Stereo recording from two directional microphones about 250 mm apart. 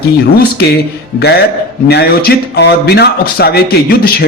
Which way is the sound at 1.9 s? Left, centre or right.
Left.